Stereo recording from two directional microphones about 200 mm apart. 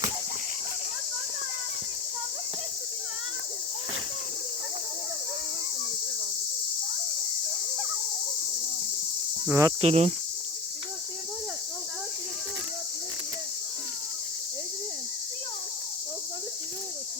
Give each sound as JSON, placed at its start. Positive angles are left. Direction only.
{"t": 9.5, "sound": "cricket", "side_deg": -15}
{"t": 9.8, "sound": "cricket", "side_deg": -30}